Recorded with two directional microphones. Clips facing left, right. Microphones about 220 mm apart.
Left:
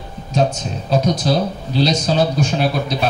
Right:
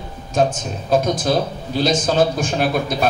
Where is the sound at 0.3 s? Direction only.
50° right (ahead or behind).